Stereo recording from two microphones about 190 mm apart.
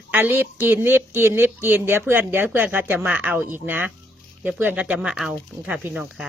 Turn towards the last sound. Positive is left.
turn(degrees=-5)  # may be behind; listen again after turning